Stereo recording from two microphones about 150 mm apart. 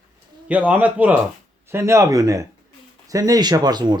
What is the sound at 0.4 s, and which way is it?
A man's voice, 10° right (ahead or behind).